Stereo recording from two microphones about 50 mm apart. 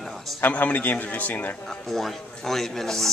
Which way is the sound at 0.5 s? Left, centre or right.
Left.